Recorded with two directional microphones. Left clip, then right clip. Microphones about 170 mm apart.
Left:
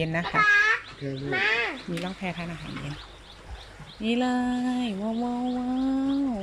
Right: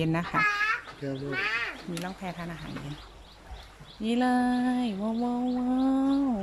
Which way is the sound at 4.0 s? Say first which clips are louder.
Even; 5° right (ahead or behind).